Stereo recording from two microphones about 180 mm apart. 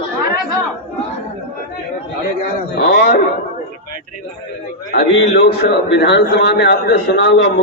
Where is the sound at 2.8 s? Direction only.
75° left (ahead or behind).